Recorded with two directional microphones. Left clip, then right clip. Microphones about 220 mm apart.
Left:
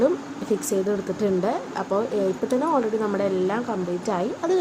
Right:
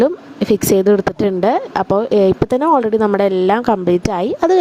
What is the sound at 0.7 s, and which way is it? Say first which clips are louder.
Speech: right 15 dB; 45° right (ahead or behind).